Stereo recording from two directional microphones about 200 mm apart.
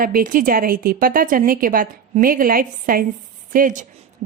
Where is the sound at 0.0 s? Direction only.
45° right (ahead or behind).